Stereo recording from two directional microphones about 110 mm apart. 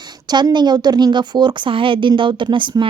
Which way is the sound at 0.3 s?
40° right (ahead or behind).